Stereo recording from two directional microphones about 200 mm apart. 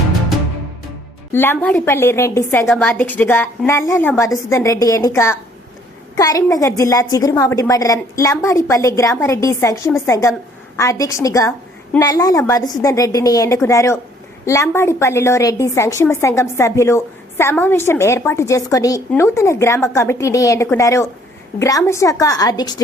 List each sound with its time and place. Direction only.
1.3 s a woman's voice: 10° left (ahead or behind)